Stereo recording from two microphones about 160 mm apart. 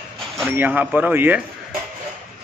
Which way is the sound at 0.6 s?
10° right (ahead or behind).